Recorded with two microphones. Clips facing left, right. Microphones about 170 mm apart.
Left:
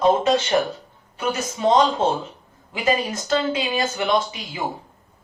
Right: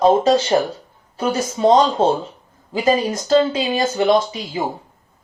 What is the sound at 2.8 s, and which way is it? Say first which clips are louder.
Speech: right 4 dB; 35° right (ahead or behind).